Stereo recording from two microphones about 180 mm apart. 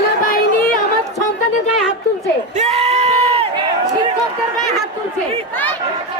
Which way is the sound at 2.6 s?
35° right (ahead or behind).